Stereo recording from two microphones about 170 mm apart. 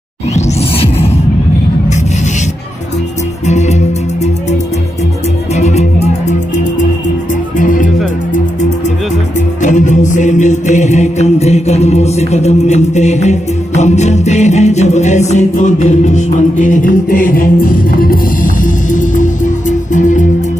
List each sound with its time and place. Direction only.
0.3 s music: 35° left (ahead or behind)
3.4 s music: 40° left (ahead or behind)
5.6 s music: 40° left (ahead or behind)
7.5 s music: 50° left (ahead or behind)
9.6 s music: 45° left (ahead or behind)